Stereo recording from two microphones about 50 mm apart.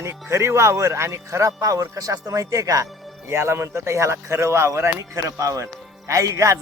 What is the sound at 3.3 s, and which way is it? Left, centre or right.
Speech, right.